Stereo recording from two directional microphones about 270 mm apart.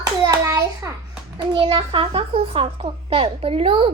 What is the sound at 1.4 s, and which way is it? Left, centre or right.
A child's voice, centre.